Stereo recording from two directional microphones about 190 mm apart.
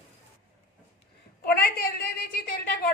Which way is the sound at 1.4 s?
55° left (ahead or behind).